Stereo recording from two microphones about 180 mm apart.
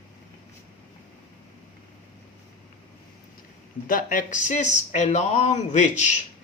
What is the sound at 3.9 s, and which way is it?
Speech, 50° left (ahead or behind).